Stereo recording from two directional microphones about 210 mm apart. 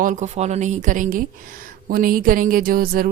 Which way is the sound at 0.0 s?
35° right (ahead or behind).